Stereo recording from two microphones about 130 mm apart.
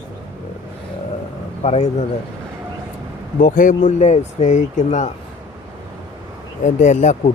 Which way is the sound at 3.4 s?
90° left.